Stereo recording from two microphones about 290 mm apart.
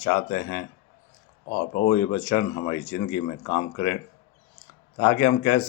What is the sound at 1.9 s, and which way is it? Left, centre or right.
Speech, left.